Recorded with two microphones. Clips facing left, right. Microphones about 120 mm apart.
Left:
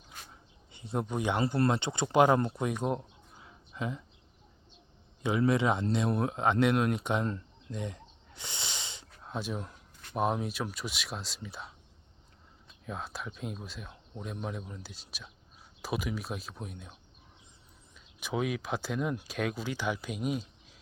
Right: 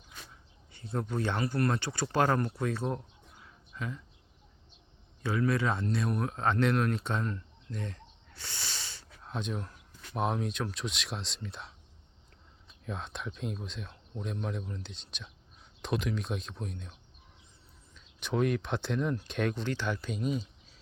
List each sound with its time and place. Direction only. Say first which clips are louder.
0.7 s speech: left 1 dB; 20° left (ahead or behind)
3.3 s a sound: left 3 dB; 25° left (ahead or behind)
5.2 s speech: left 2 dB; 20° left (ahead or behind)
7.3 s a sound: left 2 dB; 20° left (ahead or behind)
9.2 s speech: even; 5° left (ahead or behind)
12.8 s speech: even; 5° left (ahead or behind)
17.9 s speech: right 2 dB; 10° left (ahead or behind)